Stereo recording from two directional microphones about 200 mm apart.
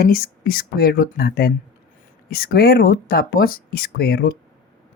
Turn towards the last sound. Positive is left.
turn(degrees=50)  # may be behind; listen again after turning